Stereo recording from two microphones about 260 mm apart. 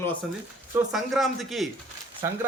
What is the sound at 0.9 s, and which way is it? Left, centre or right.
Speech, centre.